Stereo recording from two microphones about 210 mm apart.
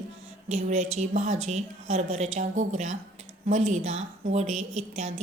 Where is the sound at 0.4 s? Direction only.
30° right (ahead or behind).